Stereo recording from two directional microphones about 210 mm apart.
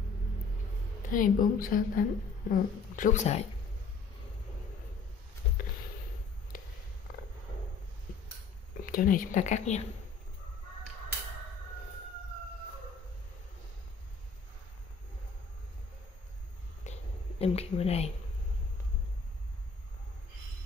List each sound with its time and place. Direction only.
1.1 s a woman's voice: 40° left (ahead or behind)
8.8 s a woman's voice: 40° left (ahead or behind)
16.9 s a sound: 35° left (ahead or behind)
17.4 s a woman's voice: 30° left (ahead or behind)